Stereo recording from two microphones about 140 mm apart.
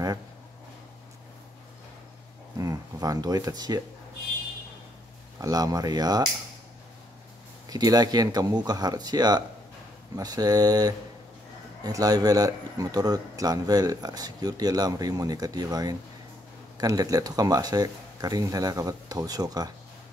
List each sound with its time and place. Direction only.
2.5 s a sound: 25° right (ahead or behind)
5.4 s speech: 25° right (ahead or behind)
7.7 s speech: 25° right (ahead or behind)